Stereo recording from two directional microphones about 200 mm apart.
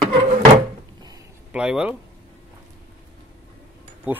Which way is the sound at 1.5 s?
5° right (ahead or behind).